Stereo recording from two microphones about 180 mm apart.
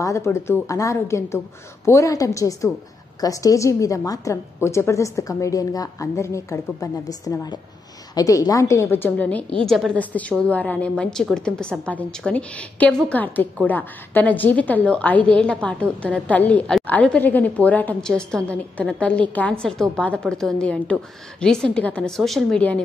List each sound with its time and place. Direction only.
0.0 s a woman's voice: 15° left (ahead or behind)